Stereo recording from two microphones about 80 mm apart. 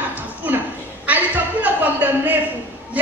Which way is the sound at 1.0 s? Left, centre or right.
Right.